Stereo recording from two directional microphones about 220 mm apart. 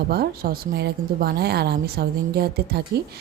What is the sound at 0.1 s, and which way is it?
Speech, 45° right (ahead or behind).